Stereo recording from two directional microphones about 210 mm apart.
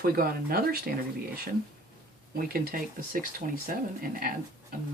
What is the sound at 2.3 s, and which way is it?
Speech, 45° right (ahead or behind).